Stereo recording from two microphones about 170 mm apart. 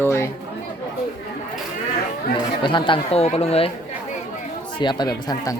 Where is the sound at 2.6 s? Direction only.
30° left (ahead or behind).